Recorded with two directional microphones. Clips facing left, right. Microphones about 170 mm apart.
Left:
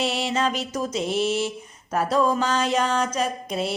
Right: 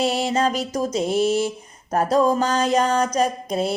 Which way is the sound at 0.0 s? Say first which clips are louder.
Right 4 dB; 40° right (ahead or behind).